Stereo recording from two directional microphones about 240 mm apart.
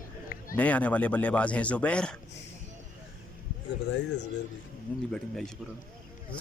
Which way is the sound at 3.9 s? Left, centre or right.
Left.